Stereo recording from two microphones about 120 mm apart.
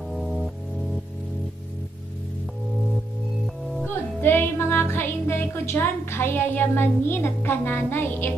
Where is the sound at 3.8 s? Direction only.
15° left (ahead or behind).